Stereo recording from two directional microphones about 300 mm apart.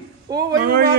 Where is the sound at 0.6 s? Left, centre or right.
Right.